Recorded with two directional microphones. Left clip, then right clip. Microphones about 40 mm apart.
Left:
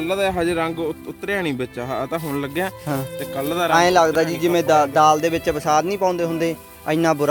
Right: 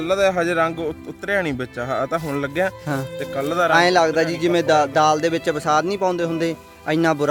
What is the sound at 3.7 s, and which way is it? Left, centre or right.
Speech, right.